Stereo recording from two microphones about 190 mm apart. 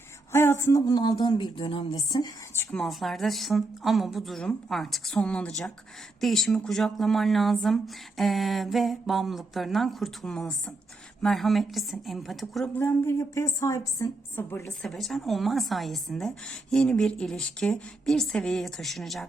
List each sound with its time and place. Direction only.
0.3 s speech: 15° left (ahead or behind)
2.7 s a woman's voice: centre (ahead or behind)